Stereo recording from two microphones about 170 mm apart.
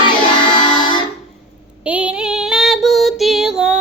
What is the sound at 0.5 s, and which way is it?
Music, 30° left (ahead or behind).